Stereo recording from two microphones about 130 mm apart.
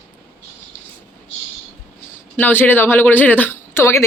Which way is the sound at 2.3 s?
15° left (ahead or behind).